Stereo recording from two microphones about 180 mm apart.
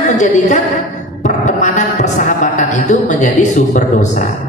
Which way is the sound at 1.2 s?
40° left (ahead or behind).